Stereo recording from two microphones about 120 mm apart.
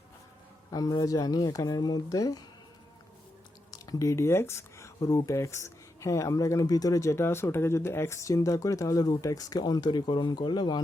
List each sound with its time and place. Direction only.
0.7 s speech: 30° left (ahead or behind)
3.7 s speech: 30° left (ahead or behind)